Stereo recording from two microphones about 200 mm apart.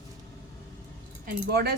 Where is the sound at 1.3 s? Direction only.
50° right (ahead or behind).